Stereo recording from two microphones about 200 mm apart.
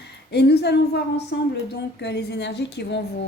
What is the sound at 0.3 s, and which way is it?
A woman's voice, 55° left (ahead or behind).